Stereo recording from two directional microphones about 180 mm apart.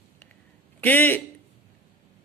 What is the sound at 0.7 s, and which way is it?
Speech, 10° left (ahead or behind).